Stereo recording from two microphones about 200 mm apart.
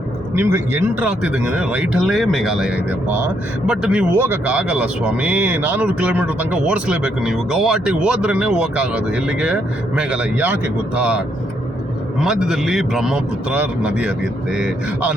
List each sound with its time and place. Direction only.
0.3 s speech: 10° right (ahead or behind)
12.2 s speech: centre (ahead or behind)